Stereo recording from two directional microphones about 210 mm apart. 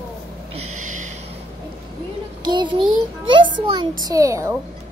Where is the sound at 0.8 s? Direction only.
35° right (ahead or behind).